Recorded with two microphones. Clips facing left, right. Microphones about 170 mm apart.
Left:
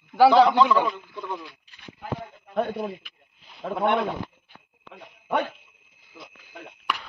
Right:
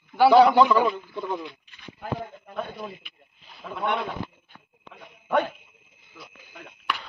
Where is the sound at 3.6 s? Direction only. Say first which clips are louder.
Left 7 dB; 40° left (ahead or behind).